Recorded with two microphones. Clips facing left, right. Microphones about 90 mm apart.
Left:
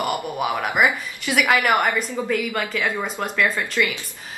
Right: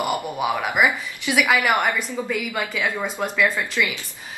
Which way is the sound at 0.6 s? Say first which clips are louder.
Left 1 dB; 15° right (ahead or behind).